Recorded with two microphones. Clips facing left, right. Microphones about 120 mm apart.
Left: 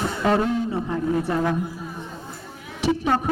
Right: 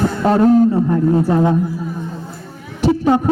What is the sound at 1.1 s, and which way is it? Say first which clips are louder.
Speech: right 5 dB; 25° right (ahead or behind).